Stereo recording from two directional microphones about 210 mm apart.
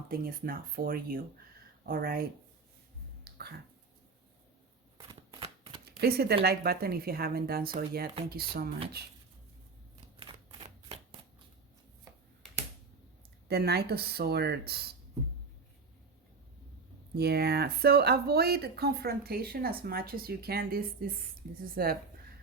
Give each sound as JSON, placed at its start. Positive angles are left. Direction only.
{"t": 0.1, "sound": "speech", "side_deg": -45}
{"t": 3.3, "sound": "a sound", "side_deg": -45}
{"t": 5.8, "sound": "speech", "side_deg": -50}
{"t": 10.2, "sound": "shuffling cards", "side_deg": -25}
{"t": 13.5, "sound": "speech", "side_deg": -50}
{"t": 17.2, "sound": "speech", "side_deg": -50}